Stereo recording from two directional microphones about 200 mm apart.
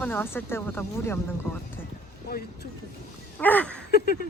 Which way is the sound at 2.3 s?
50° left (ahead or behind).